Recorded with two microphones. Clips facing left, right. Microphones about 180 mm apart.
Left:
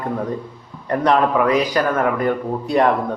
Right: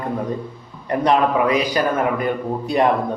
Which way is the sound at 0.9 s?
20° right (ahead or behind).